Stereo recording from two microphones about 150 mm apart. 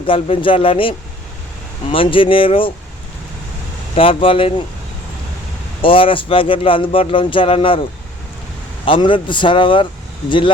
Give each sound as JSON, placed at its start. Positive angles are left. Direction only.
{"t": 0.0, "sound": "speech", "side_deg": 35}
{"t": 3.9, "sound": "speech", "side_deg": 35}
{"t": 5.8, "sound": "speech", "side_deg": 35}